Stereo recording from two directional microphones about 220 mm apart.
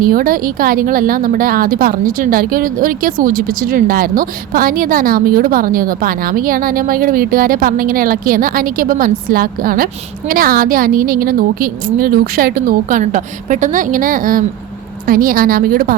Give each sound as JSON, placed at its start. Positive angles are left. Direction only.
{"t": 0.0, "sound": "a woman's voice", "side_deg": -40}